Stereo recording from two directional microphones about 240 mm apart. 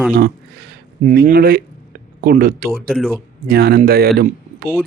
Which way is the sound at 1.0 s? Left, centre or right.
Right.